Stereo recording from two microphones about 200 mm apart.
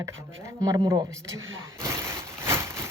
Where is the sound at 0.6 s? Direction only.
20° right (ahead or behind).